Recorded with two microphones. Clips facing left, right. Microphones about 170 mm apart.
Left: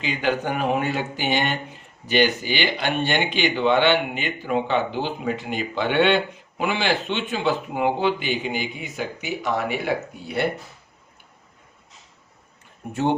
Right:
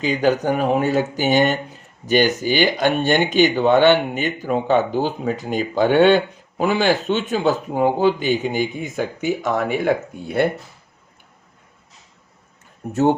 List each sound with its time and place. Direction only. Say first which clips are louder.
0.0 s speech: right 6 dB; 40° right (ahead or behind)
12.9 s speech: right 5 dB; 45° right (ahead or behind)